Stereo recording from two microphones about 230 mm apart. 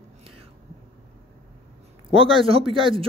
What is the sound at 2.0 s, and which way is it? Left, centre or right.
Speech, right.